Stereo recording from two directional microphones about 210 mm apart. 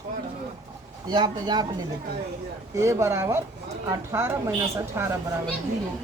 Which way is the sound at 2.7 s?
15° right (ahead or behind).